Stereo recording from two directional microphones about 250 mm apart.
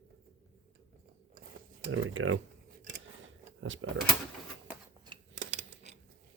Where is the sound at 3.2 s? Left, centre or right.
Right.